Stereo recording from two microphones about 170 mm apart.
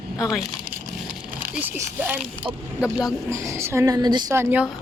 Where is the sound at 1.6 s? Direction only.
10° right (ahead or behind).